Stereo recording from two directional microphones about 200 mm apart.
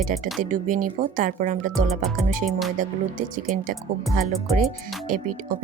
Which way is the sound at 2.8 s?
40° right (ahead or behind).